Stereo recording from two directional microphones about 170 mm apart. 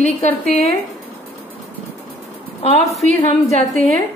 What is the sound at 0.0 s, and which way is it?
Speech, 40° left (ahead or behind).